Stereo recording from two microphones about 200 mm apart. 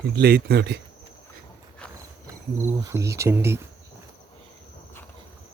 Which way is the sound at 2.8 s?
15° right (ahead or behind).